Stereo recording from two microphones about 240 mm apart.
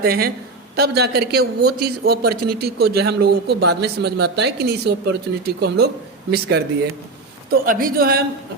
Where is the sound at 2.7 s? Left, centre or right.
Right.